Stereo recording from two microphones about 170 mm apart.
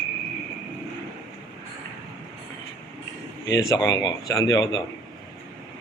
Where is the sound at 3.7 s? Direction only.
25° left (ahead or behind).